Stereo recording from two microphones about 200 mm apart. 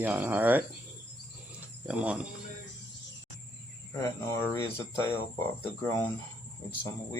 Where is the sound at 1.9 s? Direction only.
5° right (ahead or behind).